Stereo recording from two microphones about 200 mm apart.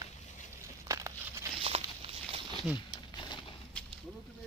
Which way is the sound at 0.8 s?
15° right (ahead or behind).